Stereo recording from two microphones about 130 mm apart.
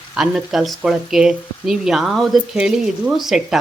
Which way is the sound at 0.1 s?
5° right (ahead or behind).